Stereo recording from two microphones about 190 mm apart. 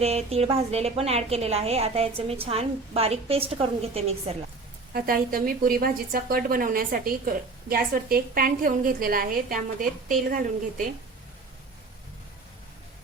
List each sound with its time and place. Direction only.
0.0 s a woman's voice: 35° right (ahead or behind)
4.9 s a woman's voice: 50° right (ahead or behind)